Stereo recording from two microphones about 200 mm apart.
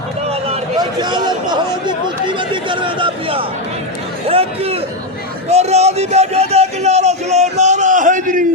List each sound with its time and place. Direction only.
0.3 s a sound: 30° right (ahead or behind)
2.5 s chatter: 25° right (ahead or behind)
4.3 s a man's voice: 30° right (ahead or behind)